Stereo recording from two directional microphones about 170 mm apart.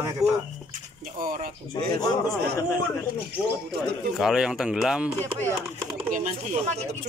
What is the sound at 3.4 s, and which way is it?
Speech, 5° right (ahead or behind).